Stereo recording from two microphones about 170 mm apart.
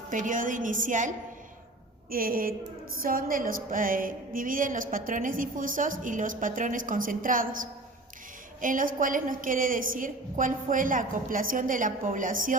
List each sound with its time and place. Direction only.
0.1 s music: 50° right (ahead or behind)
2.0 s a woman's voice: 55° right (ahead or behind)
3.0 s music: 55° right (ahead or behind)